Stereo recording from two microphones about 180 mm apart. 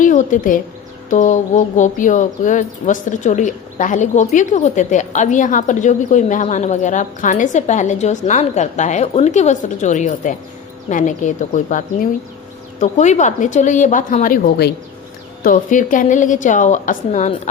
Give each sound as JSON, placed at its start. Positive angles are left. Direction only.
{"t": 0.0, "sound": "speech", "side_deg": 45}